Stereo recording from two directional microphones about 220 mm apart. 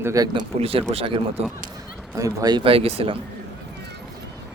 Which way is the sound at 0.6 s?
25° right (ahead or behind).